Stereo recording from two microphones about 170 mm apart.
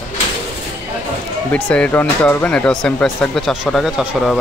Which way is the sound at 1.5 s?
5° left (ahead or behind).